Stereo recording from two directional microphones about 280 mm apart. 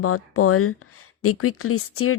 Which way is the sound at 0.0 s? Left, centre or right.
Left.